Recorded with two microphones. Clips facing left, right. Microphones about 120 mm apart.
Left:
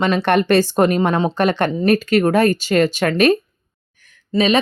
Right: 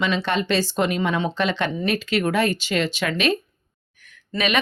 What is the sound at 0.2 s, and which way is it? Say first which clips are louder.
Speech: left 8 dB; 60° left (ahead or behind).